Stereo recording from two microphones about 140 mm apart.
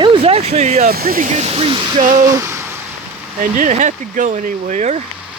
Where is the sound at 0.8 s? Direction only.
90° right.